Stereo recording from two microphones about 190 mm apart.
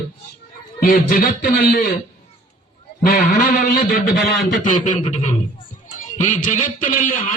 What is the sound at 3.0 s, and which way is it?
A man's voice, 50° left (ahead or behind).